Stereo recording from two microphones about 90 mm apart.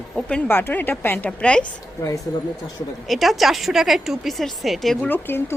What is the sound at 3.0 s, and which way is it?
Speech, centre (ahead or behind).